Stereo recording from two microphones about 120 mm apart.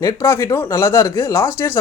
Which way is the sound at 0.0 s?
25° left (ahead or behind).